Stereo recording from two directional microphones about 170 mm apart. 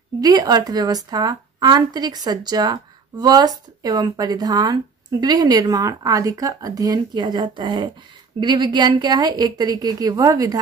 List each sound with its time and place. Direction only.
0.2 s speech: 25° right (ahead or behind)